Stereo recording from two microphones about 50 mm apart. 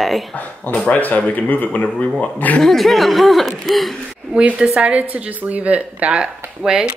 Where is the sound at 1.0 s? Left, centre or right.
Left.